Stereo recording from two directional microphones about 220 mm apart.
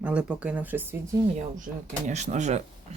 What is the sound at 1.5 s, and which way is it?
Speech, 35° right (ahead or behind).